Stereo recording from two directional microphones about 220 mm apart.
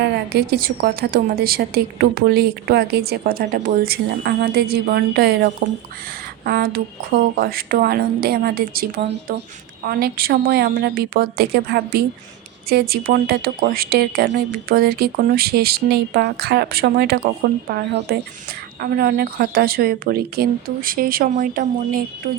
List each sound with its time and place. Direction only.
0.3 s a woman's voice: 45° right (ahead or behind)